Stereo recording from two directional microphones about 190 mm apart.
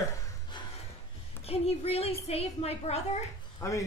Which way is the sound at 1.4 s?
30° left (ahead or behind).